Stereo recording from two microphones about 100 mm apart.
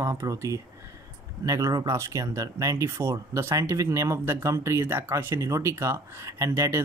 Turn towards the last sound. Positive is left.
turn(degrees=-30)  # may be behind; listen again after turning